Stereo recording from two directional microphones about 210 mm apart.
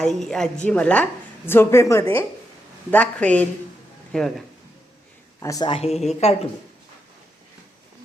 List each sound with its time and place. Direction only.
0.0 s a woman's voice: 5° left (ahead or behind)
5.4 s speech: 15° left (ahead or behind)